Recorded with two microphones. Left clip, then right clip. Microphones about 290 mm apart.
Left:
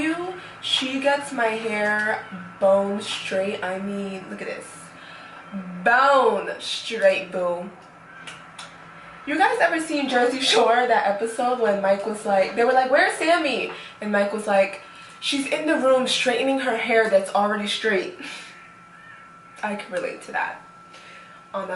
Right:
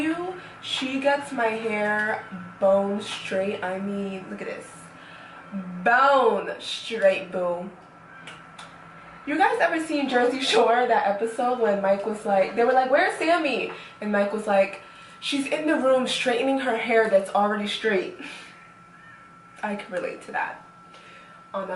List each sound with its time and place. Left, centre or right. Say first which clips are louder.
0.8 s speech: even; centre
2.6 s a sound: left 2 dB; centre
3.5 s speech: left 1 dB; centre
3.9 s speech: left 1 dB; right
4.3 s speech: left 2 dB; centre
5.8 s speech: left 2 dB; centre
7.3 s speech: left 2 dB; centre
9.2 s speech: left 2 dB; centre
11.6 s a sound: left 1 dB; centre
12.3 s speech: left 2 dB; centre
19.6 s speech: left 2 dB; centre